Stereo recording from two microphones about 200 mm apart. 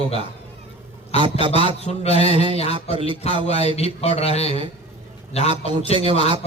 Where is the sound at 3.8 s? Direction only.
30° left (ahead or behind).